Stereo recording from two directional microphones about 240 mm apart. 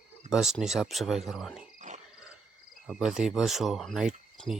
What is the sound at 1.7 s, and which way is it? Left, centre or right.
Cricket, right.